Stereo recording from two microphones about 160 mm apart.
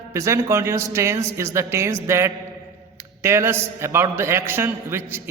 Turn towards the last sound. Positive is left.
turn(degrees=-15)  # may be behind; listen again after turning